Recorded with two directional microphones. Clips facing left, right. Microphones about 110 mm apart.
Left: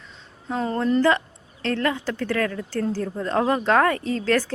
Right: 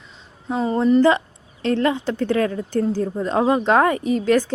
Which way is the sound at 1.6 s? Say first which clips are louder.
Right 4 dB; 20° right (ahead or behind).